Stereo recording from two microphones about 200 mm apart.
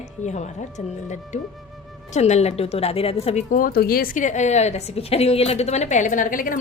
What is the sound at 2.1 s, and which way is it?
A woman's voice, 35° left (ahead or behind).